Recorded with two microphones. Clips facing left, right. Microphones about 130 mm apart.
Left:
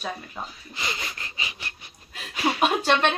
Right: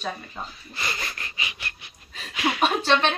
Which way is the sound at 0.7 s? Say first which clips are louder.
Even; 20° left (ahead or behind).